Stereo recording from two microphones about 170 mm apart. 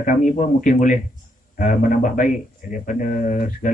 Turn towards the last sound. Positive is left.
turn(degrees=50)  # may be behind; listen again after turning